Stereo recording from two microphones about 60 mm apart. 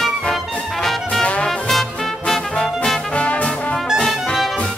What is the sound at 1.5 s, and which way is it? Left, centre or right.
Music, centre.